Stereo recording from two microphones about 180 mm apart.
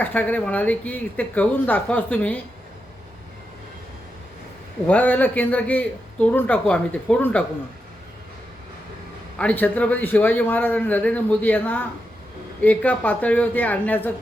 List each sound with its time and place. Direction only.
0.0 s a man's voice: 10° left (ahead or behind)
4.9 s a man's voice: 10° left (ahead or behind)
9.4 s a man's voice: 10° left (ahead or behind)